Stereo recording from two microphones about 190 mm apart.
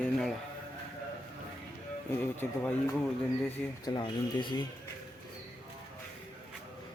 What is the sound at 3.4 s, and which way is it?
Speech, 20° left (ahead or behind).